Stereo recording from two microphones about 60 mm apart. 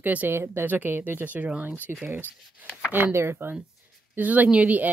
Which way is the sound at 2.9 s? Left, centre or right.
Right.